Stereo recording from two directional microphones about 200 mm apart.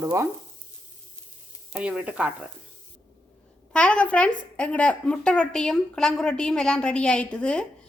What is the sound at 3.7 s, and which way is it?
Speech, 5° left (ahead or behind).